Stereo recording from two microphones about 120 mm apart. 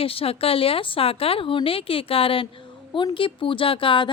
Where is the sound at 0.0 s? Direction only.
50° left (ahead or behind).